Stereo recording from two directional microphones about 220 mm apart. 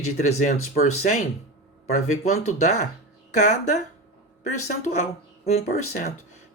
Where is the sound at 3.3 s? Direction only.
35° left (ahead or behind).